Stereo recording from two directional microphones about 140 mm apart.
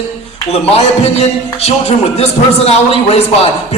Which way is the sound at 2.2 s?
45° left (ahead or behind).